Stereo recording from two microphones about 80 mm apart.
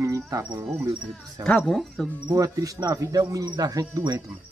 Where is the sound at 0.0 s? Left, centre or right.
Right.